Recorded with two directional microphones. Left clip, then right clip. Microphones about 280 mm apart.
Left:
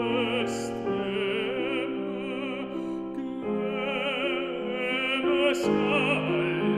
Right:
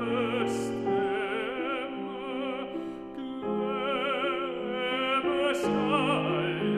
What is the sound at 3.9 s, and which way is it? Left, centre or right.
Music, left.